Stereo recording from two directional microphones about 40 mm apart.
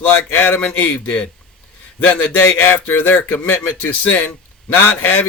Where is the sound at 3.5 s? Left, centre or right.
Left.